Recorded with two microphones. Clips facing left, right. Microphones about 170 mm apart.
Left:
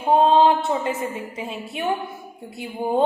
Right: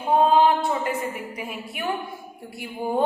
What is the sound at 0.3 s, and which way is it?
A woman's voice, 25° left (ahead or behind).